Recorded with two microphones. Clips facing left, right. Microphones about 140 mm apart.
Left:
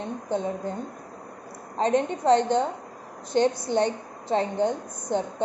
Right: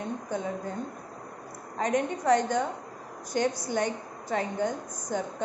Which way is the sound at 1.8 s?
25° left (ahead or behind).